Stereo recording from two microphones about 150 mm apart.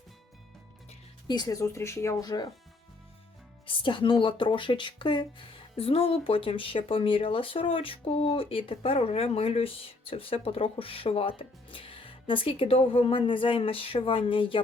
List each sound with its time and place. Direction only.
1.3 s speech: 25° left (ahead or behind)
3.7 s speech: 35° left (ahead or behind)